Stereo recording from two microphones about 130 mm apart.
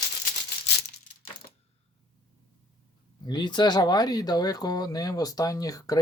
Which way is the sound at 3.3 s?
35° left (ahead or behind).